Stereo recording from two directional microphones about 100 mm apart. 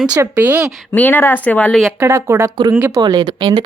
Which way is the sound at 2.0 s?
30° right (ahead or behind).